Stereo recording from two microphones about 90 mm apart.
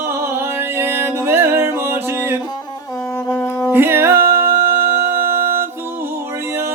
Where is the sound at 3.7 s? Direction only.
25° right (ahead or behind).